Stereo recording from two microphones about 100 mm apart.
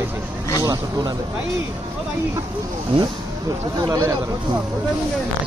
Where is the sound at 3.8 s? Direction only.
35° right (ahead or behind).